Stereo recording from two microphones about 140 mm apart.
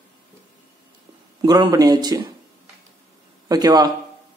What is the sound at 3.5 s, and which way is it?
Speech, 25° right (ahead or behind).